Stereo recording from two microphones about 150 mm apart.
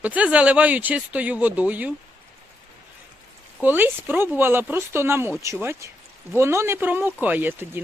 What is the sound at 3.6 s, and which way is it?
Speech, 15° right (ahead or behind).